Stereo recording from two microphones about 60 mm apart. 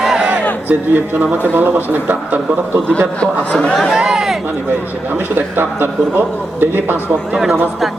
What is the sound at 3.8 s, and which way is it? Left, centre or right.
Speech, centre.